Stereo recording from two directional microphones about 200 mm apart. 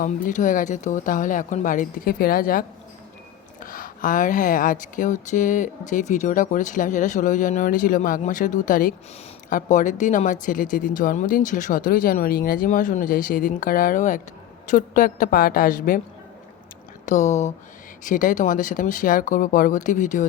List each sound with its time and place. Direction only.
0.0 s speech: 40° left (ahead or behind)
17.1 s speech: 35° left (ahead or behind)